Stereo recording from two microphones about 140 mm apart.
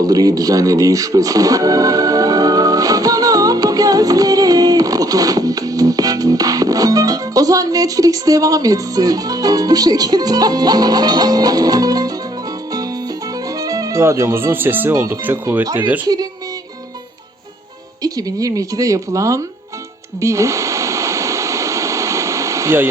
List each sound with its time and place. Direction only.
0.0 s speech: 25° right (ahead or behind)
13.6 s speech: 25° right (ahead or behind)
18.0 s speech: 25° right (ahead or behind)
20.2 s a sound: 20° right (ahead or behind)